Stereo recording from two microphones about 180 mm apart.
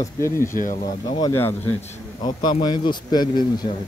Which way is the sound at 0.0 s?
15° left (ahead or behind).